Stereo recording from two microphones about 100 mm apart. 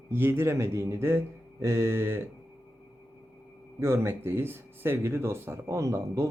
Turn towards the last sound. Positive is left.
turn(degrees=-30)  # may be behind; listen again after turning